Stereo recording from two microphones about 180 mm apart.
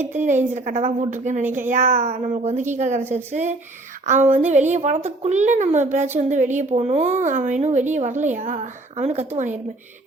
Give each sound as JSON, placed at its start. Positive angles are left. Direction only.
{"t": 0.5, "sound": "a woman's voice", "side_deg": -40}
{"t": 3.0, "sound": "a woman's voice", "side_deg": -15}
{"t": 4.0, "sound": "a woman's voice", "side_deg": -40}